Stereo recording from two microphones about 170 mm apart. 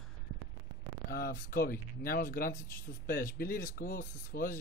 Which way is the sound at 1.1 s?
60° left (ahead or behind).